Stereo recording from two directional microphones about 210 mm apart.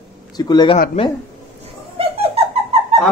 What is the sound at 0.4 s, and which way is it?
Speech, 20° left (ahead or behind).